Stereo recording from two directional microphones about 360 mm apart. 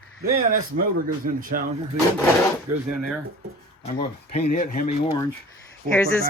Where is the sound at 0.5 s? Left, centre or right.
Right.